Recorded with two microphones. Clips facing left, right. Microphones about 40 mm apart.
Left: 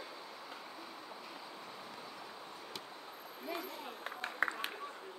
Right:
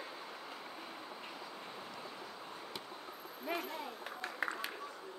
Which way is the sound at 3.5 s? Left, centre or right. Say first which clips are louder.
Right 3 dB; right.